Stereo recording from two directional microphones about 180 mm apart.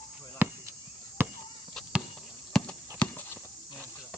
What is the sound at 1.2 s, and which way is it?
Chop, 15° right (ahead or behind).